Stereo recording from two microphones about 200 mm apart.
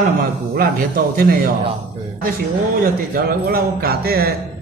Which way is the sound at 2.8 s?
45° right (ahead or behind).